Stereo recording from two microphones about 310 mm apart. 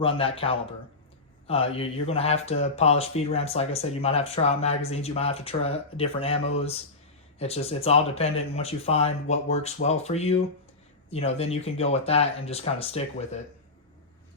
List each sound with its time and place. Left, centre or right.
0.0 s speech: centre